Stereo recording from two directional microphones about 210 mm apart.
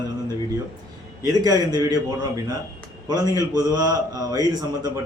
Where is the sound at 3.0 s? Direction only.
15° right (ahead or behind).